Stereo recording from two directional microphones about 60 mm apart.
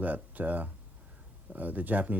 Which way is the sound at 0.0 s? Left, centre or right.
Right.